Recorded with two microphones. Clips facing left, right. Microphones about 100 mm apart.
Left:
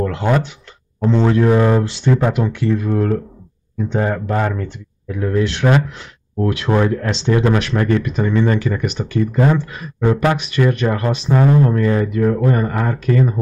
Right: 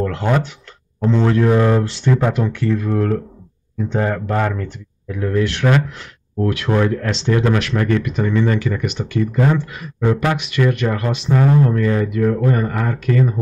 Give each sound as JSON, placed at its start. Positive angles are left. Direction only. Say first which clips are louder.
{"t": 0.0, "sound": "a sound", "louder": "left 1 dB", "side_deg": 15}
{"t": 1.0, "sound": "speech", "louder": "left 1 dB", "side_deg": 15}
{"t": 5.5, "sound": "speech", "louder": "left 1 dB", "side_deg": 30}